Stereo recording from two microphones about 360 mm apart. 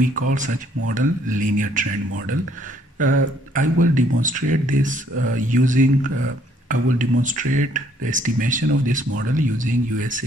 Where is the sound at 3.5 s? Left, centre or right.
Right.